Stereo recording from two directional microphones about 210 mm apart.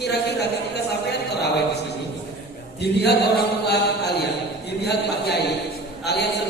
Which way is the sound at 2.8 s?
50° left (ahead or behind).